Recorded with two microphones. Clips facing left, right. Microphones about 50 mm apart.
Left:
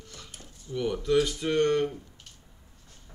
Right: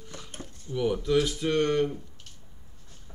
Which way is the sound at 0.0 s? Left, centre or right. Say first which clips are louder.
Right 3 dB; centre.